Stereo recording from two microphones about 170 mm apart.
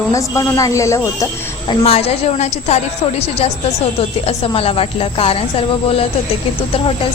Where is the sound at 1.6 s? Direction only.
35° left (ahead or behind).